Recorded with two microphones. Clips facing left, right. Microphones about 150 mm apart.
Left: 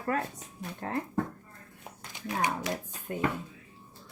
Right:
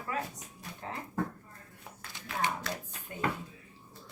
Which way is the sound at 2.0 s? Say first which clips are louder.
Left 3 dB; 15° left (ahead or behind).